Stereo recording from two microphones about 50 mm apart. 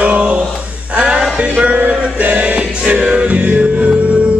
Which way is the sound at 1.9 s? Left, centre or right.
Right.